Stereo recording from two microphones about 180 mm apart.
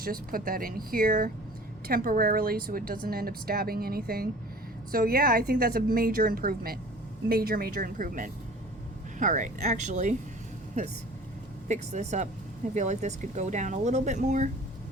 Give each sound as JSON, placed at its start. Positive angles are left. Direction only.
{"t": 0.0, "sound": "a woman's voice", "side_deg": -55}
{"t": 11.7, "sound": "speech", "side_deg": -40}